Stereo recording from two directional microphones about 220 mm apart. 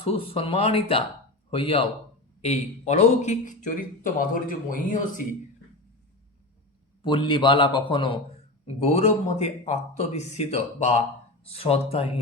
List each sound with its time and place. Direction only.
0.0 s a man's voice: 25° left (ahead or behind)
7.0 s a man's voice: 20° left (ahead or behind)